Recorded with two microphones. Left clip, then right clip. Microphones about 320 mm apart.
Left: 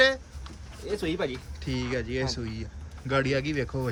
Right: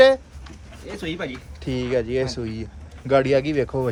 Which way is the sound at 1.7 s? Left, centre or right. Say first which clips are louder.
Right 8 dB; centre.